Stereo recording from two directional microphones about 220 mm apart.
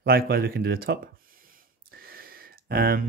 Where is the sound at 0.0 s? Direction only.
45° right (ahead or behind).